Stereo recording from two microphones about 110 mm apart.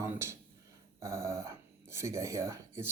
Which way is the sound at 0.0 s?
25° right (ahead or behind).